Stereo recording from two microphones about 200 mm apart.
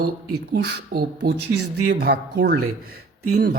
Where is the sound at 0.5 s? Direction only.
55° right (ahead or behind).